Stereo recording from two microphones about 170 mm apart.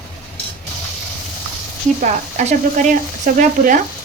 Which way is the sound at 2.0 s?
50° right (ahead or behind).